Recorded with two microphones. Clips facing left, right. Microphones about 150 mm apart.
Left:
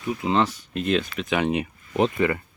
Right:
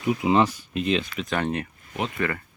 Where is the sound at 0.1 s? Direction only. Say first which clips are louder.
Right 2 dB; 10° right (ahead or behind); by 2.4 s 20° left (ahead or behind).